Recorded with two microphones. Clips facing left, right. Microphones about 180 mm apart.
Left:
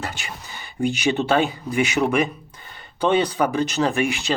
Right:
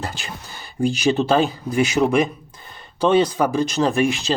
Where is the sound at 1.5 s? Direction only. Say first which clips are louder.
Right 2 dB; 15° left (ahead or behind).